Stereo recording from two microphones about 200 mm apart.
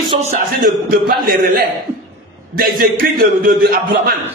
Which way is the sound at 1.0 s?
50° right (ahead or behind).